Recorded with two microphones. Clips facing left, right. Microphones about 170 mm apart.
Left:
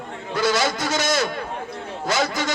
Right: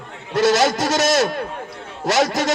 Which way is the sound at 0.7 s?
40° right (ahead or behind).